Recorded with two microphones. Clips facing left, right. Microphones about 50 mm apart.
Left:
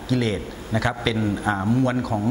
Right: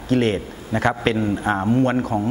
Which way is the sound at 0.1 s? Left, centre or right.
Right.